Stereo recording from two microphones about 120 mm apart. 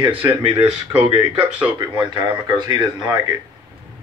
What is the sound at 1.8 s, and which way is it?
Speech, 40° right (ahead or behind).